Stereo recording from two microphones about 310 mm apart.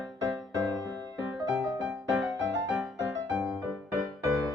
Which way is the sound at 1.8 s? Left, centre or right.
Centre.